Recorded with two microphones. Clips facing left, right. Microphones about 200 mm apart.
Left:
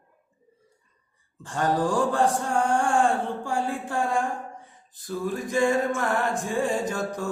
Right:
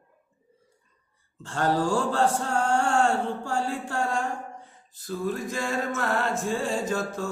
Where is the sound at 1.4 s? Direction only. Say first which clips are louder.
Even; 15° left (ahead or behind).